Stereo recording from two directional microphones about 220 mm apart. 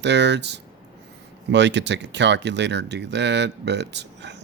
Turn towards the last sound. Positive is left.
turn(degrees=-50)  # may be behind; listen again after turning